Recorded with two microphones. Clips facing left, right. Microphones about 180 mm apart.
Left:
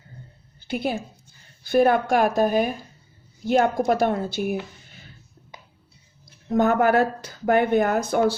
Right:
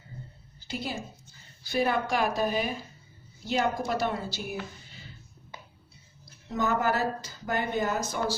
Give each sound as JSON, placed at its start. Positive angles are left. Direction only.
{"t": 0.7, "sound": "a woman's voice", "side_deg": 60}
{"t": 6.5, "sound": "speech", "side_deg": 55}